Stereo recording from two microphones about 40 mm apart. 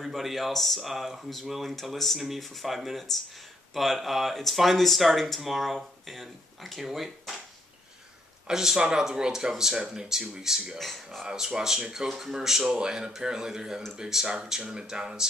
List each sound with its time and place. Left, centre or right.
0.0 s speech: centre
8.5 s speech: centre
9.8 s speech: right
10.0 s speech: centre
10.8 s speech: centre
11.2 s speech: centre